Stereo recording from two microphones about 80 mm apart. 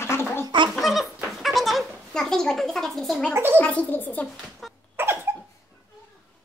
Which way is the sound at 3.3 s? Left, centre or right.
Right.